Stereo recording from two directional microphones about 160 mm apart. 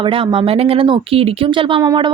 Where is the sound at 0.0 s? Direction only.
35° right (ahead or behind).